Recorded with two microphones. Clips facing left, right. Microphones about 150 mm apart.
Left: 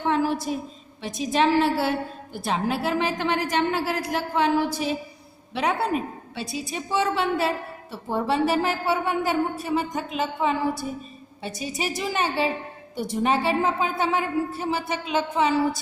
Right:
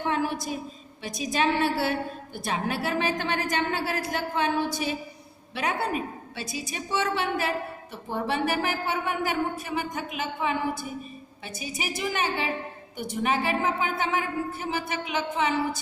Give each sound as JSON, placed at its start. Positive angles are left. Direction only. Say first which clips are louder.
{"t": 0.0, "sound": "a woman's voice", "louder": "left 4 dB", "side_deg": 30}